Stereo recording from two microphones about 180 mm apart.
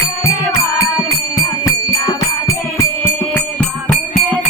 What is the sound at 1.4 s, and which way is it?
Music, 20° left (ahead or behind).